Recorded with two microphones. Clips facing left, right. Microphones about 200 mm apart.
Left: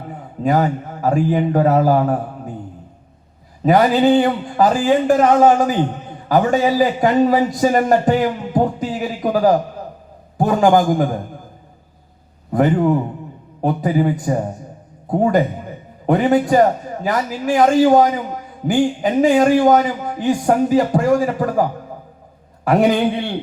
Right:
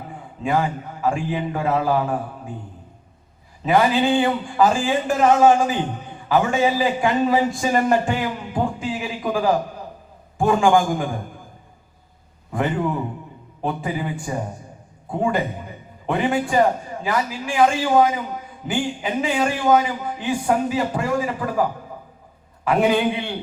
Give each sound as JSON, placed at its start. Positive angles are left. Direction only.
{"t": 0.4, "sound": "a man's voice", "side_deg": 40}
{"t": 3.6, "sound": "a man's voice", "side_deg": 40}
{"t": 12.5, "sound": "a man's voice", "side_deg": 40}